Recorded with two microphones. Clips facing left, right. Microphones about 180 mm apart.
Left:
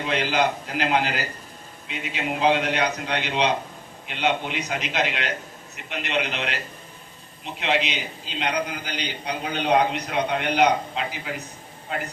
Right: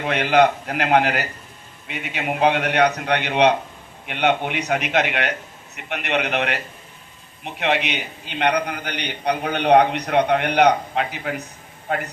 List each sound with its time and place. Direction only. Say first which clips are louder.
0.0 s a man's voice: right 6 dB; 60° right (ahead or behind)